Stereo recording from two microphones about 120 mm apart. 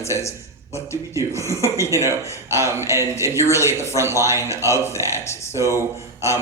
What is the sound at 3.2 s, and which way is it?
A man's voice, 25° left (ahead or behind).